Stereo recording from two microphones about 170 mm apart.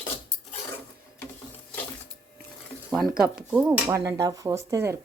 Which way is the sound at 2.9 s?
Centre (ahead or behind).